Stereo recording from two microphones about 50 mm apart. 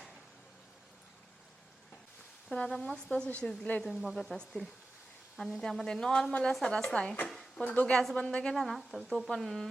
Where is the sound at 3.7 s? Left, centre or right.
Left.